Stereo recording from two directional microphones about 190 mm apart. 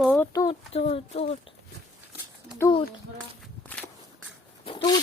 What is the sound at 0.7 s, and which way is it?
Speech, 35° left (ahead or behind).